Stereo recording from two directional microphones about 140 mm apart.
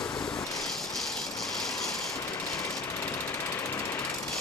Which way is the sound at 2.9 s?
20° left (ahead or behind).